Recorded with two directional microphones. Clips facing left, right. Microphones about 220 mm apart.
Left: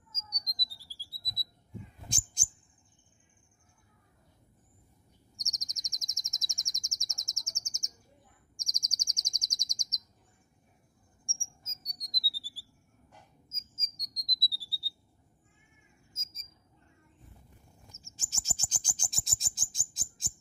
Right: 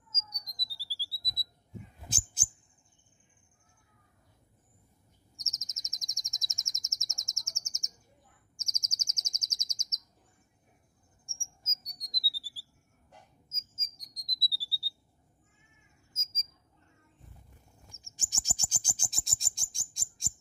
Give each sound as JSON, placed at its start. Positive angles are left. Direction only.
{"t": 0.3, "sound": "squawk", "side_deg": -5}
{"t": 2.0, "sound": "owl", "side_deg": -5}
{"t": 5.4, "sound": "bird", "side_deg": 0}
{"t": 8.5, "sound": "chirp", "side_deg": -5}
{"t": 11.2, "sound": "a sound", "side_deg": 0}
{"t": 13.5, "sound": "insect", "side_deg": 0}
{"t": 16.1, "sound": "cricket", "side_deg": 0}
{"t": 18.0, "sound": "bird", "side_deg": -15}